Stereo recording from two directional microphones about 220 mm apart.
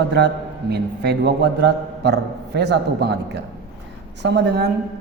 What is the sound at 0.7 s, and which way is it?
A man's voice, 50° right (ahead or behind).